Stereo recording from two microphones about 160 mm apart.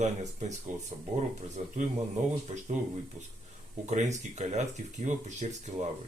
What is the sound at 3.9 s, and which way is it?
Speech, 45° right (ahead or behind).